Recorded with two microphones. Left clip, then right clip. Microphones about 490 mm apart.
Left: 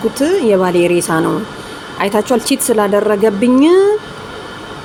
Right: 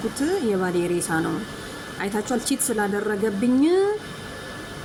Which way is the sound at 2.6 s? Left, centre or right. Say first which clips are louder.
Left 14 dB; right.